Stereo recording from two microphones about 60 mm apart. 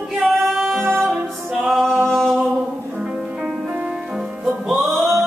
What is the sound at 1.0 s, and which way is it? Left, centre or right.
Music, centre.